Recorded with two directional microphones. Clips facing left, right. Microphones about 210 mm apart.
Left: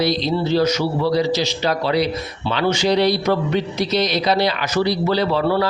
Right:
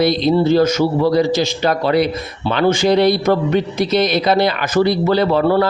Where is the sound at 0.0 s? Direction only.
55° right (ahead or behind).